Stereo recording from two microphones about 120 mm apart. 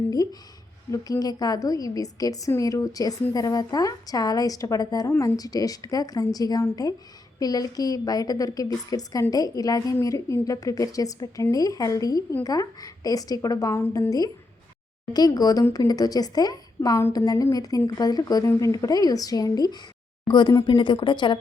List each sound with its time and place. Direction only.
0.2 s a woman's voice: 30° left (ahead or behind)